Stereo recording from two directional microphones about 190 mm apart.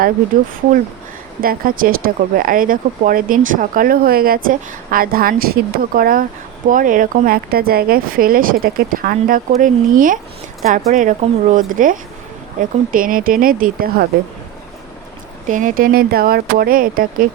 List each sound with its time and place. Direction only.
1.4 s speech: 50° right (ahead or behind)
15.4 s speech: 45° right (ahead or behind)